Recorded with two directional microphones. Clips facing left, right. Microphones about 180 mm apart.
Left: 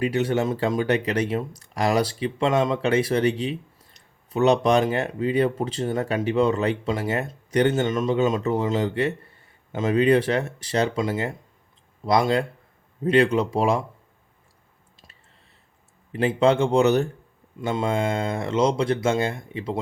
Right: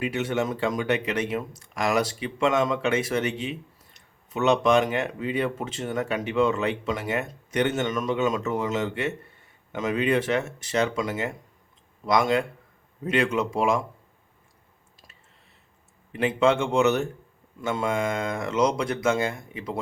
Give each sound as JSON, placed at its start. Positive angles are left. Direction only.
{"t": 0.0, "sound": "speech", "side_deg": 35}
{"t": 16.1, "sound": "speech", "side_deg": 35}